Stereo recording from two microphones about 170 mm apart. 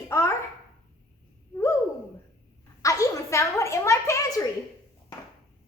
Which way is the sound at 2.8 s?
20° left (ahead or behind).